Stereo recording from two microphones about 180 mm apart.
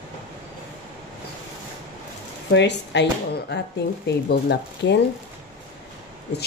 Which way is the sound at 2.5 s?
75° left (ahead or behind).